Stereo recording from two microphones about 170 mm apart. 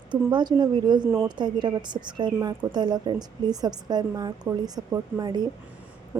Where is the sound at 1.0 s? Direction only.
15° right (ahead or behind).